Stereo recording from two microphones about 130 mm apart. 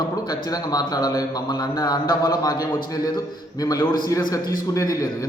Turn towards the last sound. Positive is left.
turn(degrees=25)  # may be behind; listen again after turning